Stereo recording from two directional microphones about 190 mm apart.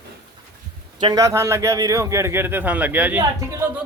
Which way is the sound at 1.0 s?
20° right (ahead or behind).